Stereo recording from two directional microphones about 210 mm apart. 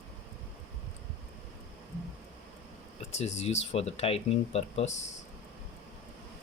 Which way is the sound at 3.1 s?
30° left (ahead or behind).